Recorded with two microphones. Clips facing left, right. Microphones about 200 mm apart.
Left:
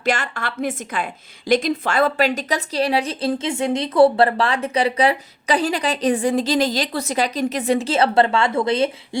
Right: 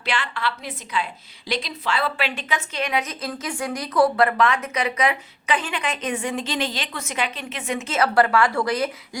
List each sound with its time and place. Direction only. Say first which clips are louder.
0.0 s a woman's voice: left 4 dB; 45° left (ahead or behind); by 8.9 s 25° left (ahead or behind)